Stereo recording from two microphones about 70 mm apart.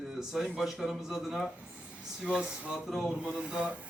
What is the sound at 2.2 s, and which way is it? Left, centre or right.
Speech, centre.